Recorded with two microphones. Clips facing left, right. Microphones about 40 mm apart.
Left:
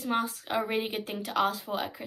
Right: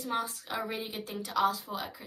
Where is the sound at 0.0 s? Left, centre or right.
Left.